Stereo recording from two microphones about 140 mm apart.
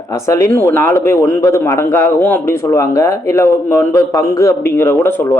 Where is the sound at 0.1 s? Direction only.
20° left (ahead or behind).